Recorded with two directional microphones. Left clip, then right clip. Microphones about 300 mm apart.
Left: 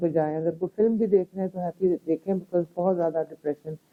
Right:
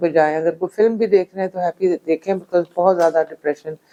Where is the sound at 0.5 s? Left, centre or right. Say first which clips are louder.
Right 7 dB; centre.